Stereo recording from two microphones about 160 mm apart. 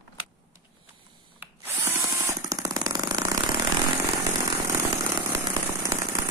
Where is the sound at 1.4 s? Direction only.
15° right (ahead or behind).